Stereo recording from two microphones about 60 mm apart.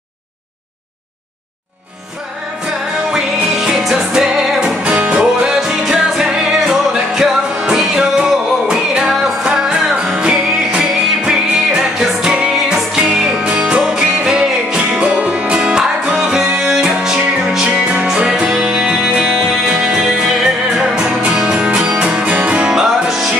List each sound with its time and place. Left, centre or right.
3.1 s music: centre
4.6 s music: centre
22.8 s music: centre